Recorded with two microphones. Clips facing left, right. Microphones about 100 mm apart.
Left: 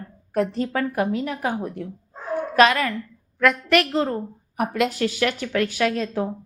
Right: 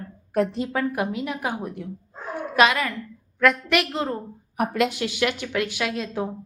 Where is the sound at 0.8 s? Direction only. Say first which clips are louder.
Left 2 dB; 35° left (ahead or behind).